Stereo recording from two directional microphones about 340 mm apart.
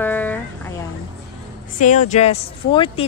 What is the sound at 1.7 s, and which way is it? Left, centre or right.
Speech, left.